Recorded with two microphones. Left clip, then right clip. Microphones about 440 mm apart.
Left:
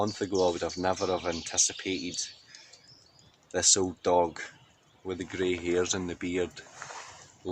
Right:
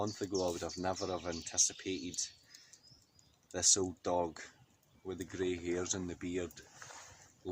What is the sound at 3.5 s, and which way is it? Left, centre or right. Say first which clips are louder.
Speech: left 6 dB; left.